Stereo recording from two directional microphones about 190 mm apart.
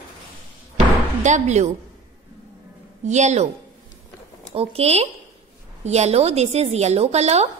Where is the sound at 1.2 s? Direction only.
40° right (ahead or behind).